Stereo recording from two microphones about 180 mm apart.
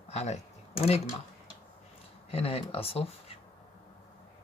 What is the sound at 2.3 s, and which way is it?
Speech, 35° left (ahead or behind).